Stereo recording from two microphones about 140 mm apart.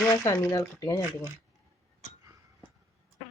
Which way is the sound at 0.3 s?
20° left (ahead or behind).